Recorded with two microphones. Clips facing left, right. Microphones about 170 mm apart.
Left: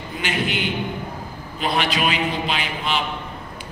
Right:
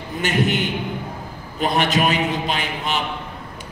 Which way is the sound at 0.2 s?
45° right (ahead or behind).